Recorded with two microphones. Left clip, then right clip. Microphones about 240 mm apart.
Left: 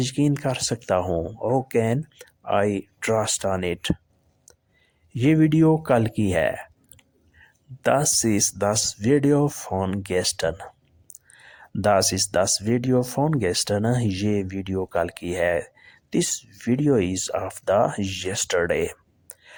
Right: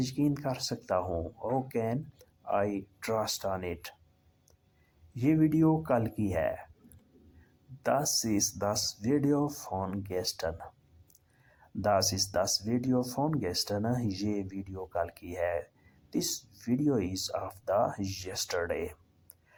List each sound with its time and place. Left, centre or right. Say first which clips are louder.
0.0 s speech: left 8 dB; left
5.2 s speech: left 8 dB; left
7.8 s speech: left 8 dB; left
16.3 s speech: left 7 dB; left
16.6 s speech: left 9 dB; left